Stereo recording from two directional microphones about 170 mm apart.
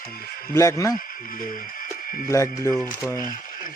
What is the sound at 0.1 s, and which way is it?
Speech, 60° left (ahead or behind).